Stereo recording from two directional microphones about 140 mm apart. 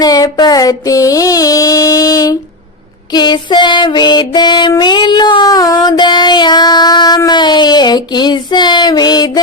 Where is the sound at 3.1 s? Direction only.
30° left (ahead or behind).